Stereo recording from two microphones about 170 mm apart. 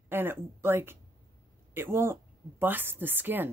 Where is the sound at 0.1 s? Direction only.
15° right (ahead or behind).